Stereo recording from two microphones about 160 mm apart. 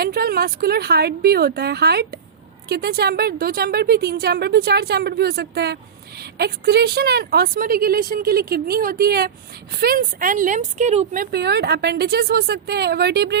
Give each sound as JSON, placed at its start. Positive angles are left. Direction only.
{"t": 0.0, "sound": "a woman's voice", "side_deg": -70}
{"t": 11.3, "sound": "a woman's voice", "side_deg": -90}